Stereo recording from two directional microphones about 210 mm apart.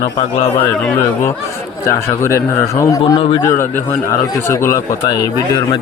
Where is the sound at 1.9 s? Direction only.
15° left (ahead or behind).